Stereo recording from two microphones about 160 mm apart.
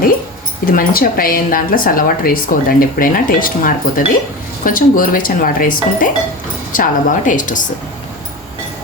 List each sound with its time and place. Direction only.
0.6 s a woman's voice: 60° left (ahead or behind)